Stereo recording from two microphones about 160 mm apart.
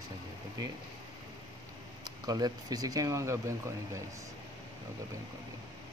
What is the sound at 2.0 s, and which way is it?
Speech, 25° right (ahead or behind).